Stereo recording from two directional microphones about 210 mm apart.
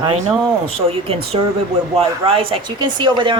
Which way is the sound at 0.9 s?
30° right (ahead or behind).